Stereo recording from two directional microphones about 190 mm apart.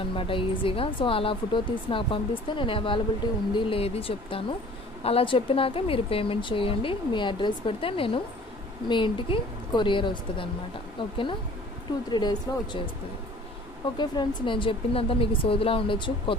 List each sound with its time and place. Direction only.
0.1 s speech: 25° left (ahead or behind)
13.9 s speech: 25° left (ahead or behind)